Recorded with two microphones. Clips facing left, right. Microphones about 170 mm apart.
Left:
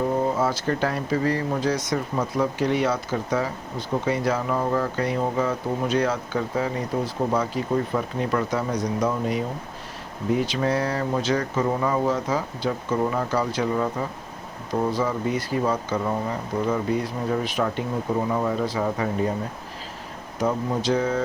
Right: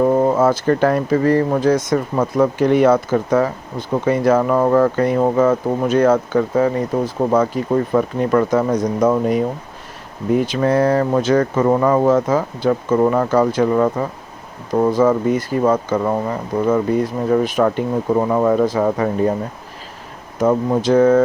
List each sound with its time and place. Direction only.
0.0 s speech: 70° right (ahead or behind); by 7.1 s 45° right (ahead or behind)
7.3 s speech: 60° right (ahead or behind)
9.0 s speech: 90° right
10.3 s speech: 50° right (ahead or behind)
14.8 s speech: 55° right (ahead or behind)
17.6 s speech: 70° right (ahead or behind)
20.4 s speech: 60° right (ahead or behind)